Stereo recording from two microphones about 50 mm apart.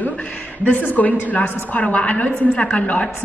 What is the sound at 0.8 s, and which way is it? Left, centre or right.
A woman's voice, left.